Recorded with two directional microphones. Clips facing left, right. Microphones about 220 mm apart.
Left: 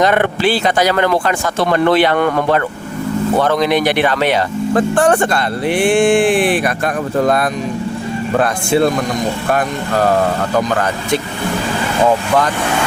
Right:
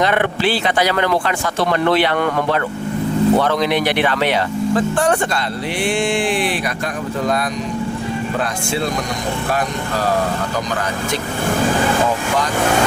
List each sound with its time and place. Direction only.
0.0 s speech: 45° left (ahead or behind)